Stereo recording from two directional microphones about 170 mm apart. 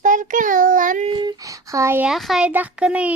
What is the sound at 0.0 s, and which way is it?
Child singing, 50° right (ahead or behind).